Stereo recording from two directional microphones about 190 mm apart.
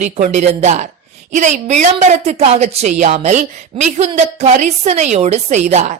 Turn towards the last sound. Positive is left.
turn(degrees=-35)  # may be behind; listen again after turning